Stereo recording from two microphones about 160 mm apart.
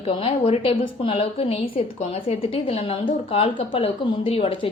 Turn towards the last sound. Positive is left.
turn(degrees=35)  # may be behind; listen again after turning